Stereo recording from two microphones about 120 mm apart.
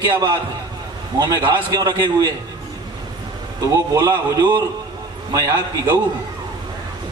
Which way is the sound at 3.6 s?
30° right (ahead or behind).